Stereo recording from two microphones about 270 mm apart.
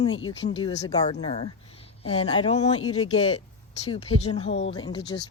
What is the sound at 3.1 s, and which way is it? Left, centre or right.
Speech, left.